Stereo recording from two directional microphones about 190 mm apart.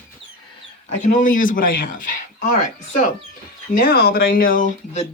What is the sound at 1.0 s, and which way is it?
Speech, 40° left (ahead or behind).